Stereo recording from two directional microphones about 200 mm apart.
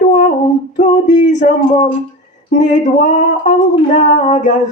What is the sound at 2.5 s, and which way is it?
Female singing, 40° left (ahead or behind).